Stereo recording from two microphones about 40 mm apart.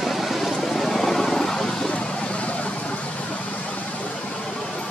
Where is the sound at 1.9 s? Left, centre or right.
Left.